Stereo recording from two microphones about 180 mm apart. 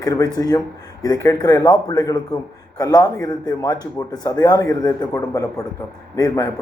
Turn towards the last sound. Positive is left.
turn(degrees=15)  # may be behind; listen again after turning